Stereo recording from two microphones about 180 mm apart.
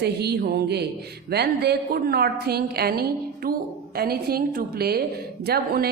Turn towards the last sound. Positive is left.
turn(degrees=-60)  # may be behind; listen again after turning